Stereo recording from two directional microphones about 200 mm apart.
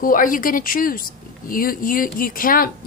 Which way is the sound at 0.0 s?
45° left (ahead or behind).